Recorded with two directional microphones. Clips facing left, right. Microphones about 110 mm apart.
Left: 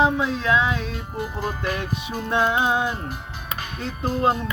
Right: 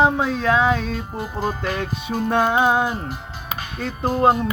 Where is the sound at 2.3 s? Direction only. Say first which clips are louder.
Right 3 dB; 50° right (ahead or behind).